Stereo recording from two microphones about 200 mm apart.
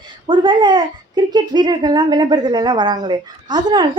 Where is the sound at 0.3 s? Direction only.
25° right (ahead or behind).